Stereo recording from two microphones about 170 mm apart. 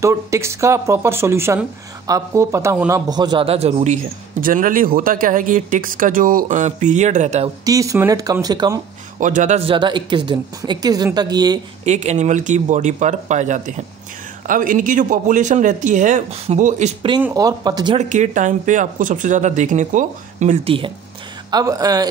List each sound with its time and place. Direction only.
0.0 s speech: 15° right (ahead or behind); by 7.5 s 40° right (ahead or behind)
7.6 s a woman's voice: 20° right (ahead or behind)
9.2 s speech: 45° right (ahead or behind)
9.7 s a woman's voice: 25° right (ahead or behind)
11.8 s speech: 40° right (ahead or behind)
17.2 s a woman's voice: 20° right (ahead or behind)
17.9 s speech: 45° right (ahead or behind)
21.5 s a woman's voice: 20° right (ahead or behind)